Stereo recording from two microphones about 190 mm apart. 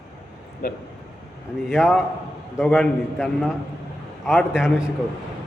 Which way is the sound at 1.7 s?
Centre (ahead or behind).